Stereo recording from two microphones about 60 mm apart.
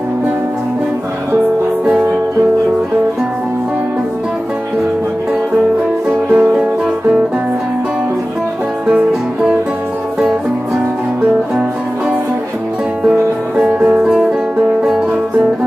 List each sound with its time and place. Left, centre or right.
6.3 s music: right
13.0 s music: centre